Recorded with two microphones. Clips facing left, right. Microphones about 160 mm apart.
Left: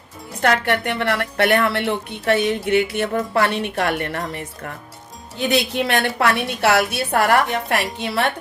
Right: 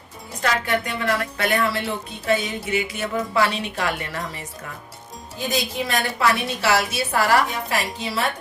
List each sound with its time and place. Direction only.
0.4 s a woman's voice: 65° left (ahead or behind)
5.4 s a woman's voice: 70° left (ahead or behind)